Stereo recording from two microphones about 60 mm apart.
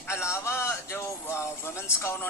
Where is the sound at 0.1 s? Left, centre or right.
Left.